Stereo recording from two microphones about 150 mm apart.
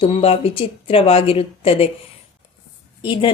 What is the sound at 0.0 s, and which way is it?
A woman's voice, 40° left (ahead or behind).